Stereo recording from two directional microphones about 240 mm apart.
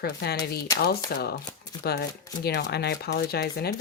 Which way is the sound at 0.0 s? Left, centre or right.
Left.